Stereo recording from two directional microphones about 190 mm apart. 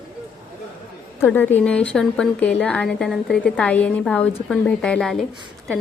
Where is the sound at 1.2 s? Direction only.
10° left (ahead or behind).